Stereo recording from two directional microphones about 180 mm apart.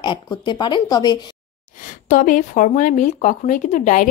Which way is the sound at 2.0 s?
45° left (ahead or behind).